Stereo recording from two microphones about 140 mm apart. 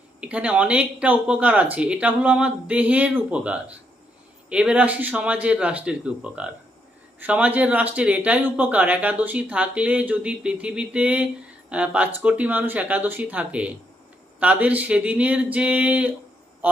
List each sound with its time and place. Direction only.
0.2 s speech: 10° right (ahead or behind)